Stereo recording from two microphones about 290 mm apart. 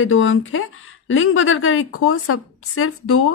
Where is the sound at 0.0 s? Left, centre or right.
Left.